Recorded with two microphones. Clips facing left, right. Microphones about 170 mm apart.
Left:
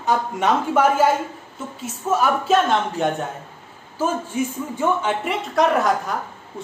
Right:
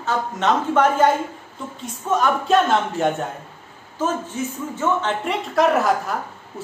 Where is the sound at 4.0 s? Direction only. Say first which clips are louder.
Left 1 dB; 10° left (ahead or behind).